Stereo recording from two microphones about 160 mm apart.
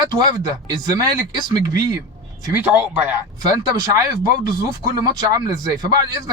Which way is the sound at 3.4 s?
25° right (ahead or behind).